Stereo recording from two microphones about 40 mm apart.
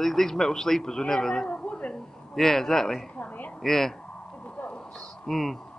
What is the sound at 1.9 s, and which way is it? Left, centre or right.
A man's voice, centre.